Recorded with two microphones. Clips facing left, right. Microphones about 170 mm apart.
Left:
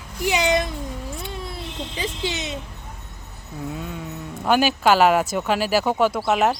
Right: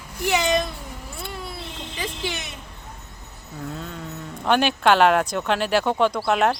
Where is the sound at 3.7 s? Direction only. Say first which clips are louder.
Left 2 dB; 5° left (ahead or behind).